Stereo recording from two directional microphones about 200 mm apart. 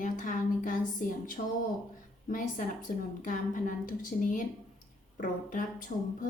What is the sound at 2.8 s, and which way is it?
A woman's voice, 40° left (ahead or behind).